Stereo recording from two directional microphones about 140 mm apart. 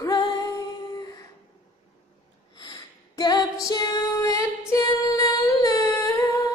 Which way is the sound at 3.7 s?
25° left (ahead or behind).